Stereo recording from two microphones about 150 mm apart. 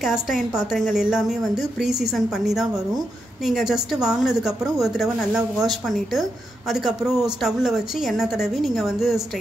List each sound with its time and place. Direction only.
0.0 s a woman's voice: centre (ahead or behind)